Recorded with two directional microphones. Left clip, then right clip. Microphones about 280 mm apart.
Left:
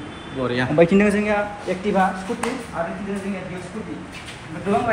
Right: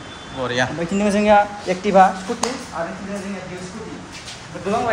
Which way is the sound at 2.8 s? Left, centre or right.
Right.